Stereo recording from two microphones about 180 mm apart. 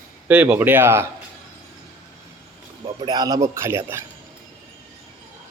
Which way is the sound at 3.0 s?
25° right (ahead or behind).